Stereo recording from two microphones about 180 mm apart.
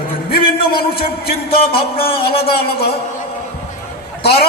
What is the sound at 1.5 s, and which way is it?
A man's voice, 30° left (ahead or behind).